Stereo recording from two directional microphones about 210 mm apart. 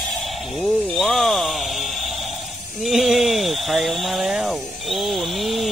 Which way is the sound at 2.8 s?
Centre (ahead or behind).